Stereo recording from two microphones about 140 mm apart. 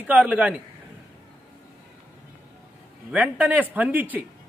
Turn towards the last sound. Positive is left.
turn(degrees=-15)  # may be behind; listen again after turning